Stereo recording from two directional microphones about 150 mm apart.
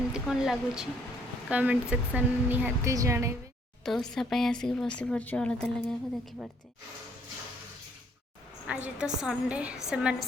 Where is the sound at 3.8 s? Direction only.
Centre (ahead or behind).